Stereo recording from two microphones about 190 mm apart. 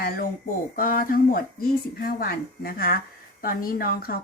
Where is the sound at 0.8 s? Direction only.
45° left (ahead or behind).